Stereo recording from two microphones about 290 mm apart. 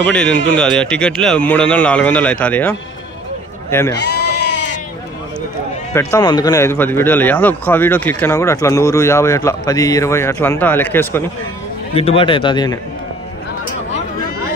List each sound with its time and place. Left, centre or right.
0.0 s a man's voice: centre
3.9 s sheep: left
5.9 s speech: centre
11.9 s speech: centre